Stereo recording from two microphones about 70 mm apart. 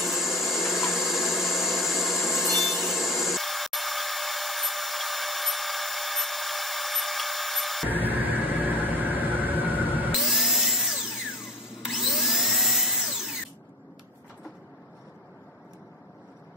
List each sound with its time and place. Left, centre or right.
0.0 s a sound: centre
7.9 s vehicle: right
10.1 s tools: centre